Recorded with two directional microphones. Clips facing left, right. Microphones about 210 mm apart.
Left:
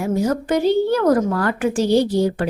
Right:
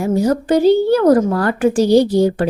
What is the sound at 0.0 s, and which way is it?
A woman's voice, 35° right (ahead or behind).